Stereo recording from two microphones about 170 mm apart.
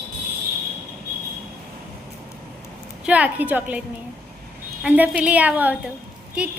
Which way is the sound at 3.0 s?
10° right (ahead or behind).